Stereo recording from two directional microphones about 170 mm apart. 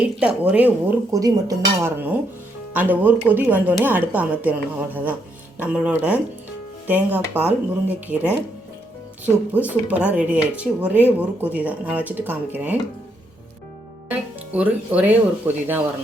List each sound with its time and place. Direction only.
0.0 s speech: 5° right (ahead or behind)
1.1 s speech: 20° right (ahead or behind)
14.1 s speech: 10° right (ahead or behind)